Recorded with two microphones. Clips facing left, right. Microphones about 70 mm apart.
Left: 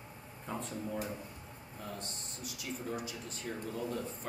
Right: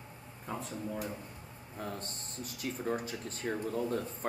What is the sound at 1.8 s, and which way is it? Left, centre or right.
Speech, right.